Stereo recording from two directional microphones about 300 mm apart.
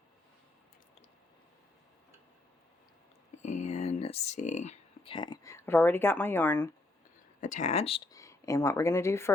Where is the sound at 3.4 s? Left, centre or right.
Left; by 6.7 s centre.